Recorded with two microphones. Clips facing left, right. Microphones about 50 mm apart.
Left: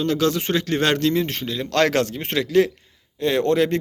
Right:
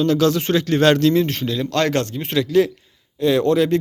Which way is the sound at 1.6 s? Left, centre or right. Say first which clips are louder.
Left 2 dB; left.